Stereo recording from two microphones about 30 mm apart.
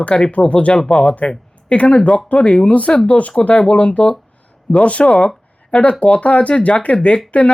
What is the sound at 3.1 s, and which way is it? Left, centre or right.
Speech, left.